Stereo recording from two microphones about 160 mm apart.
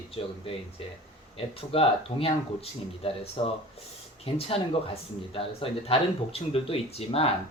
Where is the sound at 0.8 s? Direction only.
40° left (ahead or behind).